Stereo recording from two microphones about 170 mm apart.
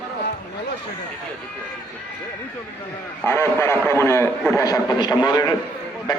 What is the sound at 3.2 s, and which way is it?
A man's voice, 15° left (ahead or behind).